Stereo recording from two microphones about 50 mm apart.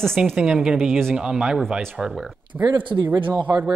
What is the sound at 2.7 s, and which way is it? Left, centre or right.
Speech, right.